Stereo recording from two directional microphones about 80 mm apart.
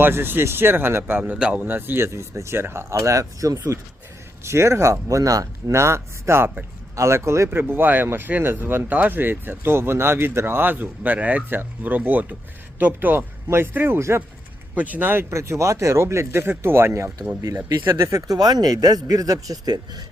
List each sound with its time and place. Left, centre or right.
0.0 s speech: right
1.6 s speech: right
7.6 s speech: right
14.8 s speech: centre
17.8 s speech: right